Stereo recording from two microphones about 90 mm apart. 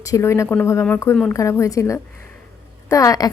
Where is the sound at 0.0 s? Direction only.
35° left (ahead or behind).